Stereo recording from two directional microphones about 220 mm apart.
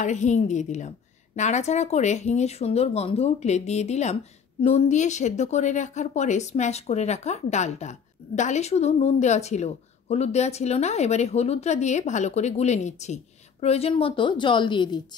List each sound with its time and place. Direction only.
0.0 s a woman's voice: 35° left (ahead or behind)